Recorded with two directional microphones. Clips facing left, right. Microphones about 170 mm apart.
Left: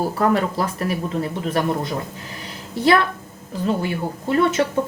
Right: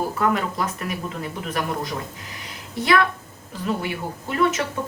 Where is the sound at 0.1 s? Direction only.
35° left (ahead or behind).